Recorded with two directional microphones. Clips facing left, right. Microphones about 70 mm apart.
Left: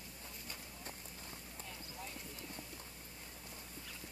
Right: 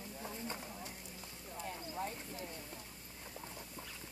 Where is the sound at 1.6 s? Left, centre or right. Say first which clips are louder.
Right 10 dB; right.